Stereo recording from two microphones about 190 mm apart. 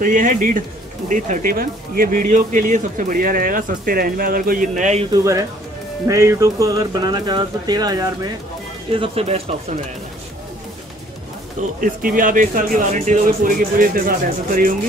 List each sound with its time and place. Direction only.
0.0 s speech: 45° right (ahead or behind)
5.1 s speech: 15° right (ahead or behind)
8.9 s speech: 30° right (ahead or behind)
11.8 s speech: 45° right (ahead or behind)